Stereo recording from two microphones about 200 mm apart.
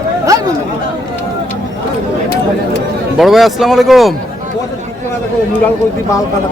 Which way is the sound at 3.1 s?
Centre (ahead or behind).